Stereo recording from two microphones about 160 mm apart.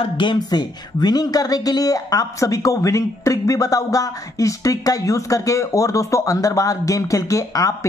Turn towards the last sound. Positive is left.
turn(degrees=20)  # may be behind; listen again after turning